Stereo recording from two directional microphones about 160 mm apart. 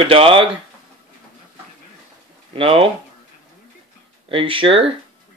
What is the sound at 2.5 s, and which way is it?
Speech, 35° right (ahead or behind).